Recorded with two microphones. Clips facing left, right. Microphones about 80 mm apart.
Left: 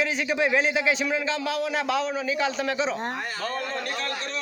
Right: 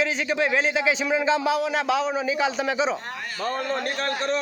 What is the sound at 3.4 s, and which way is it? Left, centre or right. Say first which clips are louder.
Speech: right 6 dB; right.